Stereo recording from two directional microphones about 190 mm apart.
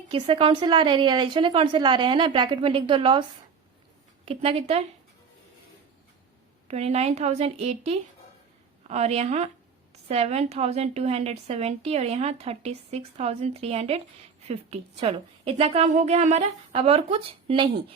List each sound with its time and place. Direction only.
0.1 s a woman's voice: 25° right (ahead or behind)
4.3 s a woman's voice: 30° right (ahead or behind)
6.7 s a woman's voice: 35° right (ahead or behind)